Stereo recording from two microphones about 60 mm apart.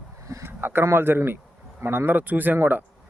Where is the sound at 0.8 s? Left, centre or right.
Right.